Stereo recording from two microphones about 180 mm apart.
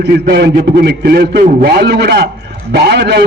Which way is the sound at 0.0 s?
65° right (ahead or behind).